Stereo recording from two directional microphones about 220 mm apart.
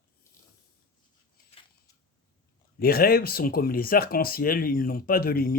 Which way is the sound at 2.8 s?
45° left (ahead or behind).